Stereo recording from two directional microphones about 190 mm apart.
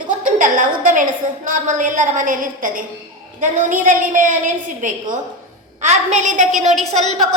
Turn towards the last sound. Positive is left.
turn(degrees=-35)  # may be behind; listen again after turning